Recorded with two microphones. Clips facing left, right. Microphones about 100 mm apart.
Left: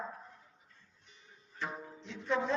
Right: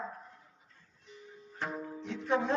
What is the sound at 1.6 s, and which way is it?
Music, 55° right (ahead or behind).